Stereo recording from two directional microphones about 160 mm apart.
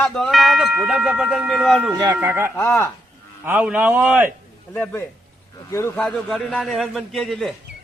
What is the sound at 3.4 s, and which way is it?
Speech, 10° right (ahead or behind).